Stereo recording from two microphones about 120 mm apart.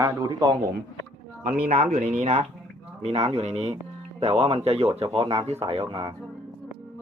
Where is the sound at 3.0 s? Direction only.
55° right (ahead or behind).